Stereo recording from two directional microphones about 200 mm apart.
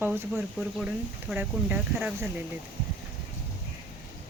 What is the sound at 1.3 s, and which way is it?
Speech, 10° right (ahead or behind).